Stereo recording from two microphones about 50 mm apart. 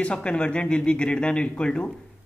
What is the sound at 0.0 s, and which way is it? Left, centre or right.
A man's voice, left.